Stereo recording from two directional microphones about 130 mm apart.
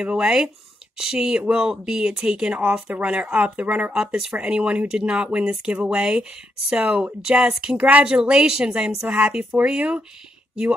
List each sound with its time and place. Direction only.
0.0 s speech: 5° right (ahead or behind)